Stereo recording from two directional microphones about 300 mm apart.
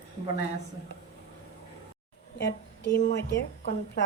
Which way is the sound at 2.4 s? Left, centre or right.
Left.